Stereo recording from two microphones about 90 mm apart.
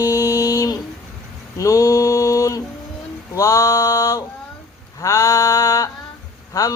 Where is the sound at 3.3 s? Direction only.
35° left (ahead or behind).